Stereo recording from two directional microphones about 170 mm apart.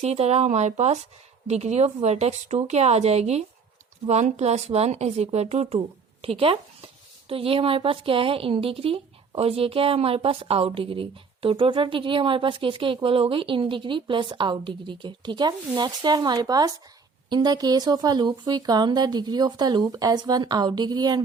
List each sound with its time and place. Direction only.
0.0 s speech: 40° right (ahead or behind); by 21.2 s 25° right (ahead or behind)